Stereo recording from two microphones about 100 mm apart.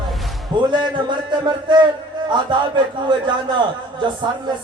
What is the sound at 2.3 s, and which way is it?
A man's voice, 50° right (ahead or behind).